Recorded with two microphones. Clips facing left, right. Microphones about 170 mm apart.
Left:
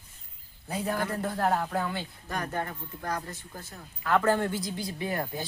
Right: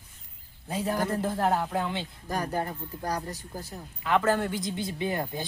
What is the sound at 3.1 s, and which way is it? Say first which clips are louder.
Speech: right 1 dB; 35° right (ahead or behind).